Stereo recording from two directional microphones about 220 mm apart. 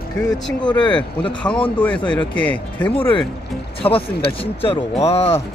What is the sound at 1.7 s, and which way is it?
Speech, 5° left (ahead or behind).